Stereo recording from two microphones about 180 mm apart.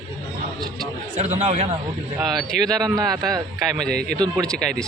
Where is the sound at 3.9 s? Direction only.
60° right (ahead or behind).